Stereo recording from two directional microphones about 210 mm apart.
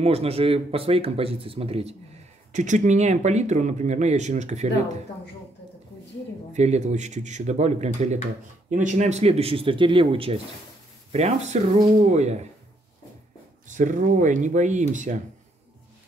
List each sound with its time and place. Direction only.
0.0 s speech: 30° right (ahead or behind)
6.5 s speech: 35° right (ahead or behind)
13.7 s speech: 35° right (ahead or behind)